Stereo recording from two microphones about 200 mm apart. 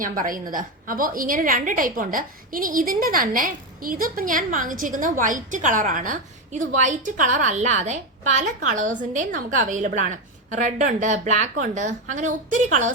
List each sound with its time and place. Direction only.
0.0 s a woman's voice: 45° right (ahead or behind)